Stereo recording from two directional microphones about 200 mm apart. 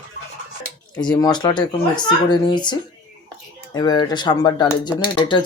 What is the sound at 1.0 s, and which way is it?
Speech, 20° left (ahead or behind).